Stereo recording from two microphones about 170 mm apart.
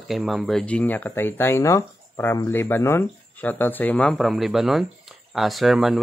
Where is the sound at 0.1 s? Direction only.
Centre (ahead or behind).